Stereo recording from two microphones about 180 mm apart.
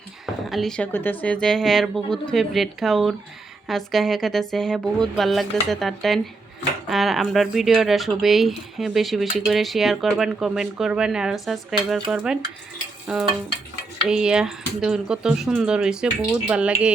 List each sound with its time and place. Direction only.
0.5 s speech: 5° left (ahead or behind)